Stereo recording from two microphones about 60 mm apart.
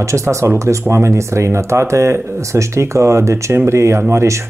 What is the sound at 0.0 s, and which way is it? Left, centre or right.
Speech, right.